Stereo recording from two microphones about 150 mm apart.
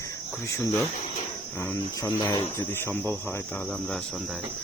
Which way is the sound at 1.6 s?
15° left (ahead or behind).